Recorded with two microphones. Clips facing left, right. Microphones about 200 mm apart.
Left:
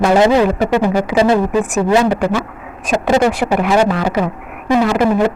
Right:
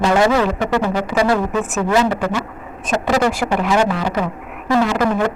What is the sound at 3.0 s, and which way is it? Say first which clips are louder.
Speech: left 4 dB; 25° left (ahead or behind).